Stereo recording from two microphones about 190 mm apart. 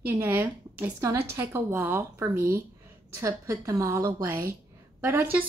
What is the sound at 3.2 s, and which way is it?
A woman's voice, 15° right (ahead or behind).